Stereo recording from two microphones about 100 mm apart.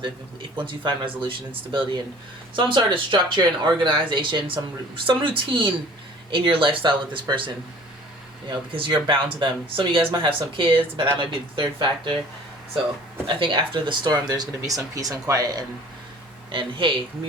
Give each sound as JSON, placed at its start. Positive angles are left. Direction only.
{"t": 0.5, "sound": "speech", "side_deg": -55}
{"t": 2.6, "sound": "speech", "side_deg": -55}
{"t": 13.2, "sound": "speech", "side_deg": -55}
{"t": 16.5, "sound": "speech", "side_deg": -55}